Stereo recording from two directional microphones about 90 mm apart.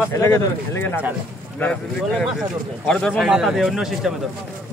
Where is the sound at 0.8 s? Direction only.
20° left (ahead or behind).